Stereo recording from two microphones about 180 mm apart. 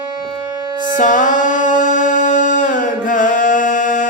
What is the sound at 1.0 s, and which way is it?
Music, 45° left (ahead or behind).